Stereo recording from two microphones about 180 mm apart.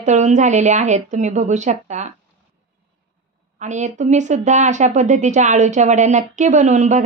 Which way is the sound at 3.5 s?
40° right (ahead or behind).